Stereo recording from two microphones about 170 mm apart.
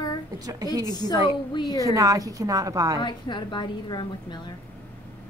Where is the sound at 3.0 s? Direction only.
25° left (ahead or behind).